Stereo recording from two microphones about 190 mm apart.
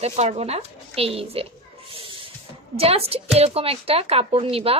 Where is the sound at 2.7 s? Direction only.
30° right (ahead or behind).